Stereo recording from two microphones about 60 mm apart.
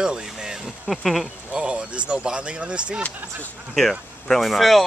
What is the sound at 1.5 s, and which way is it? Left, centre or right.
Speech, centre.